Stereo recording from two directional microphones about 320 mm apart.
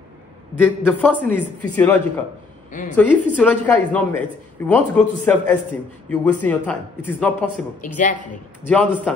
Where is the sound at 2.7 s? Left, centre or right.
Left.